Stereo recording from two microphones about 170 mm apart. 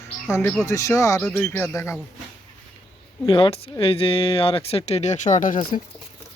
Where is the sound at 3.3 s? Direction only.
35° left (ahead or behind); by 5.7 s 55° left (ahead or behind).